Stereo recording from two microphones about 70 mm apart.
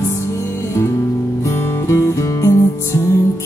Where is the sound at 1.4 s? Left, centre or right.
Left.